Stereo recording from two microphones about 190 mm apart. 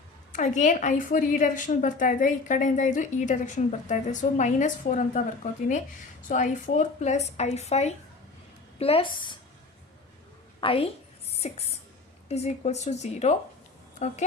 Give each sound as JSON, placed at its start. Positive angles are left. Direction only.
{"t": 0.3, "sound": "a woman's voice", "side_deg": 40}
{"t": 10.6, "sound": "a woman's voice", "side_deg": 30}